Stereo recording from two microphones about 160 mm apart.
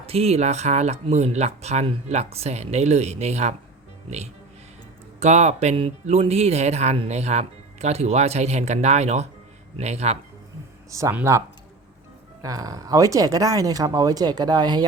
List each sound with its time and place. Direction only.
0.0 s speech: 40° right (ahead or behind)
5.2 s speech: 45° right (ahead or behind)
10.9 s speech: 15° right (ahead or behind)